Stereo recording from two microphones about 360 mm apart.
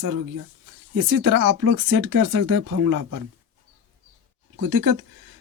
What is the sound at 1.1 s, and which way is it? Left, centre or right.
Speech, right.